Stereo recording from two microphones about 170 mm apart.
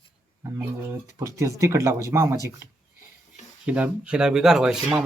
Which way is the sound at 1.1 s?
20° right (ahead or behind).